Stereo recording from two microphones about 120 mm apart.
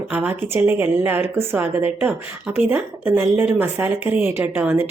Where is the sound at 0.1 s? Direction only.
15° right (ahead or behind).